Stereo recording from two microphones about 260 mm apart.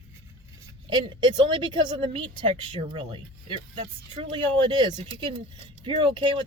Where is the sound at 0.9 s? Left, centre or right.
Centre.